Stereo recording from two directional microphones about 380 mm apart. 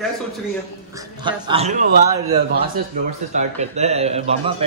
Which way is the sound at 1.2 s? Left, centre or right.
Centre.